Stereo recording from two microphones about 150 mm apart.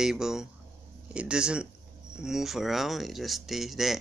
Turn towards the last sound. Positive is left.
turn(degrees=0)  # may be behind; listen again after turning